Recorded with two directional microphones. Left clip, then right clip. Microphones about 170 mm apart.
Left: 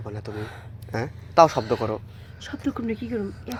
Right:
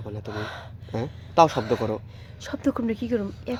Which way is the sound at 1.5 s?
45° right (ahead or behind).